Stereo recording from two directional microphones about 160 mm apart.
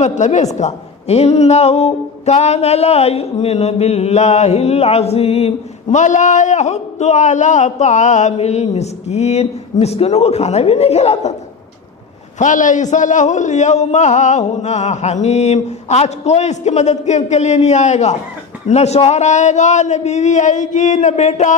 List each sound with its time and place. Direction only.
0.0 s a woman's voice: 45° left (ahead or behind)
12.4 s a woman's voice: 55° left (ahead or behind)